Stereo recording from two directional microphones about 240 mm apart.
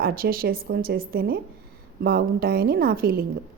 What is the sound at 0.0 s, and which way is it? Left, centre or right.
A woman's voice, right.